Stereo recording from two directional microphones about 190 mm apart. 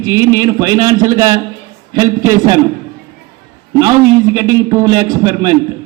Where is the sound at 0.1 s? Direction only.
20° right (ahead or behind).